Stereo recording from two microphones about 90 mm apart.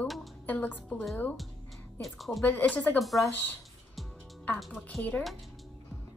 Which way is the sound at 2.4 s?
15° left (ahead or behind).